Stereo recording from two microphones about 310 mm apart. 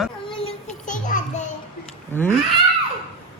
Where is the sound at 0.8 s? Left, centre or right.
Left.